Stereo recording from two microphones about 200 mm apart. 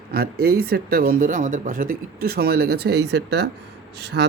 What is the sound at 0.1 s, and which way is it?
Speech, 50° right (ahead or behind).